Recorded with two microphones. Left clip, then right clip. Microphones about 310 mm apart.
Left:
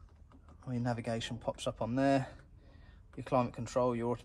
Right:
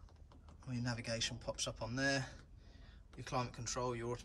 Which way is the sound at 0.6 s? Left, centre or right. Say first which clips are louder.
Left 7 dB; centre.